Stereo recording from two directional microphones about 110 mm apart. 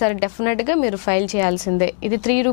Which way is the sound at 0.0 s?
15° left (ahead or behind).